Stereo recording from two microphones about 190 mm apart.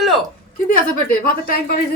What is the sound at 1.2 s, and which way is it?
Speech, 50° left (ahead or behind).